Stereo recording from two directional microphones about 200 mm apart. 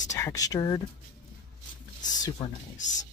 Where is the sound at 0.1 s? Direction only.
15° left (ahead or behind).